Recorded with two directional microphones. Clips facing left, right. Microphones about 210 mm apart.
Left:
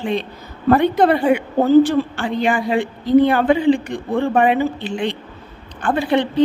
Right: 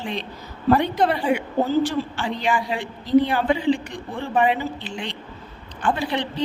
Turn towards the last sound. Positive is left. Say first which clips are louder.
# left 6 dB
turn(degrees=55)  # may be behind; listen again after turning